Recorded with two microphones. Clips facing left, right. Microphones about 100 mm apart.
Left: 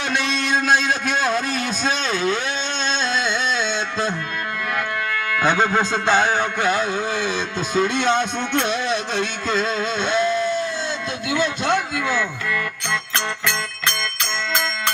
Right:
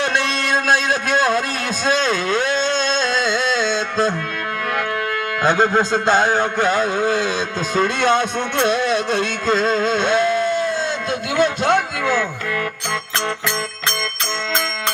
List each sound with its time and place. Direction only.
2.0 s a sound: 45° right (ahead or behind)
5.7 s a man's voice: 35° right (ahead or behind)
8.6 s music: 50° right (ahead or behind)
11.3 s speech: 45° right (ahead or behind)
13.8 s music: 35° right (ahead or behind)